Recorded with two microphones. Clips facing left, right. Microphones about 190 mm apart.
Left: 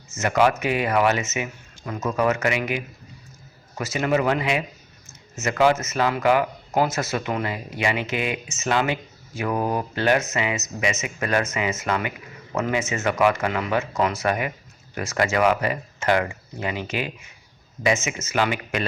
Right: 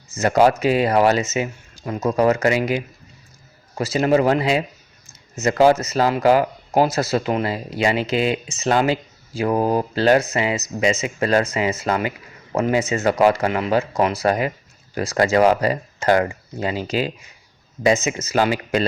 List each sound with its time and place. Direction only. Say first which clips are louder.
0.1 s speech: right 4 dB; 35° right (ahead or behind)
13.5 s speech: right 4 dB; 20° right (ahead or behind)
13.7 s speech: right 4 dB; 35° right (ahead or behind)